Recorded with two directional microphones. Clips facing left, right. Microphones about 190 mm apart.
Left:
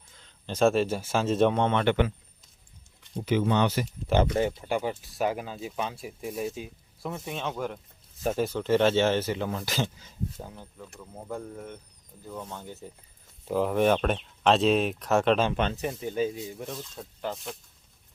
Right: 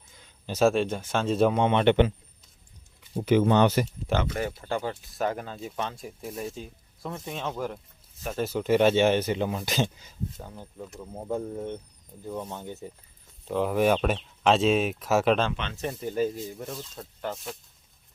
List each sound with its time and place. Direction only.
0.2 s speech: 10° right (ahead or behind)
1.5 s speech: 15° right (ahead or behind)
3.2 s speech: 45° right (ahead or behind)
4.2 s speech: 25° left (ahead or behind)
4.6 s speech: 10° left (ahead or behind)
8.5 s speech: 15° right (ahead or behind)
12.2 s speech: 15° right (ahead or behind)
13.5 s speech: centre (ahead or behind)
15.5 s speech: 45° left (ahead or behind)
15.8 s speech: 10° left (ahead or behind)